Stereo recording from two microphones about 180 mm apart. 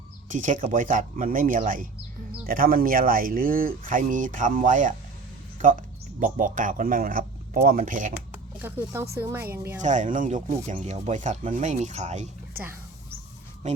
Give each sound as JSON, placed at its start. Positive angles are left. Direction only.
{"t": 0.3, "sound": "speech", "side_deg": -45}
{"t": 6.1, "sound": "speech", "side_deg": -45}
{"t": 8.3, "sound": "a sound", "side_deg": -10}
{"t": 9.1, "sound": "a woman's voice", "side_deg": -10}
{"t": 9.8, "sound": "speech", "side_deg": -45}